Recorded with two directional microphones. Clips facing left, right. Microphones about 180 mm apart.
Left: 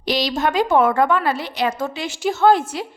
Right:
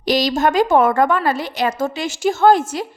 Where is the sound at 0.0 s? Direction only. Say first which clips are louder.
Right 4 dB; 45° right (ahead or behind).